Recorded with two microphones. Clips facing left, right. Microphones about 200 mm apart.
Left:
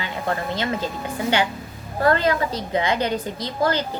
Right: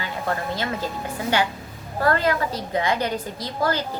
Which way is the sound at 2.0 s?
20° left (ahead or behind).